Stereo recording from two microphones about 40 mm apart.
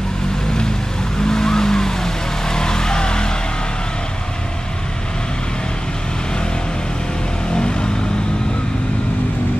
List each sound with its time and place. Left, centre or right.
1.2 s vehicle: centre
7.5 s vehicle: centre